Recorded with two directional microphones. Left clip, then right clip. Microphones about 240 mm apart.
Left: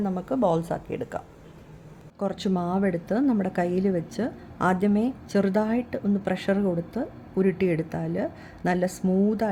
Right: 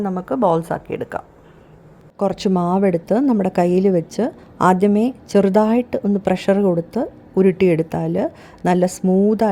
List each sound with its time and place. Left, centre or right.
0.0 s a woman's voice: centre